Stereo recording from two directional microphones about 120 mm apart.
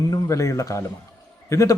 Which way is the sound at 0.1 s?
25° left (ahead or behind).